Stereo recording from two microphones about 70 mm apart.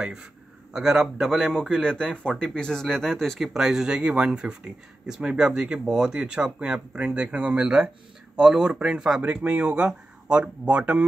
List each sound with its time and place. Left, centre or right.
0.0 s speech: centre